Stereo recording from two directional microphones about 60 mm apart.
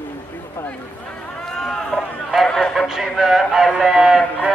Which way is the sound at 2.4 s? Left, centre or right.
Centre.